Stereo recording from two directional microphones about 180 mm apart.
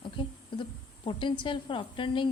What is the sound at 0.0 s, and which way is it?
A woman's voice, 25° left (ahead or behind).